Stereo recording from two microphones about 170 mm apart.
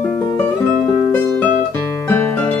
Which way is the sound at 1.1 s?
15° left (ahead or behind).